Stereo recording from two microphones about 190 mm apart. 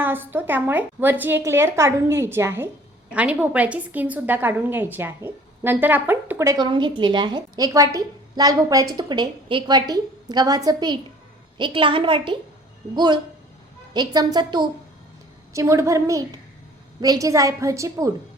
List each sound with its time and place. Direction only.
0.0 s a woman's voice: 10° right (ahead or behind); by 12.4 s 25° right (ahead or behind)
13.9 s a woman's voice: 20° right (ahead or behind)